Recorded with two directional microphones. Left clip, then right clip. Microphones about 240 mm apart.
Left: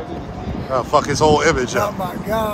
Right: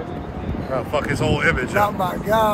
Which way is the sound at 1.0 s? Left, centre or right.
Centre.